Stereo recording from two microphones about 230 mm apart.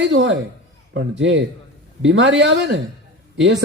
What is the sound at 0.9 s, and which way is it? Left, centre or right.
A man's voice, right.